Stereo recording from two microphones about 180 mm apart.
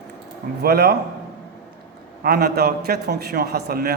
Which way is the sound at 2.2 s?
60° right (ahead or behind).